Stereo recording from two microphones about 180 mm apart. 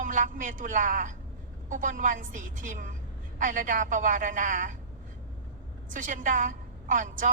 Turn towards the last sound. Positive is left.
turn(degrees=-45)  # may be behind; listen again after turning